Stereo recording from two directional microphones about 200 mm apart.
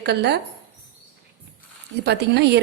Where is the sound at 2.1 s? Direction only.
55° right (ahead or behind).